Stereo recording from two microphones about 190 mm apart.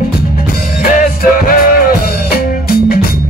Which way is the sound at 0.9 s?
45° left (ahead or behind).